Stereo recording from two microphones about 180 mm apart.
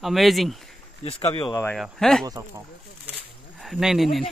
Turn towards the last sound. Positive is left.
turn(degrees=0)  # may be behind; listen again after turning